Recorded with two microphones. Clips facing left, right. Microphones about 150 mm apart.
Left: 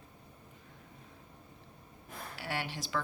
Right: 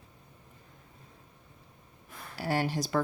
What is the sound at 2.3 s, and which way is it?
Speech, 40° right (ahead or behind).